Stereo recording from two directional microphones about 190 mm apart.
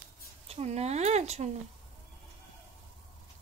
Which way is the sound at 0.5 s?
35° right (ahead or behind).